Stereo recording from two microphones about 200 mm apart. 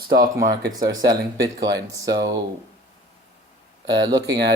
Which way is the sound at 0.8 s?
20° right (ahead or behind).